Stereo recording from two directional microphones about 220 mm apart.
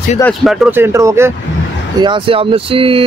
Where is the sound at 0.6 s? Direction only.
10° right (ahead or behind).